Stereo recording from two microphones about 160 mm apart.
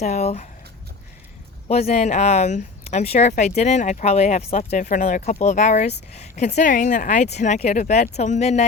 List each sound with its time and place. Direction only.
0.0 s speech: 45° left (ahead or behind)
1.6 s speech: 40° left (ahead or behind)